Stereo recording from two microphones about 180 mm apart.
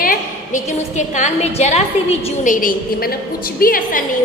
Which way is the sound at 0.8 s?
40° left (ahead or behind).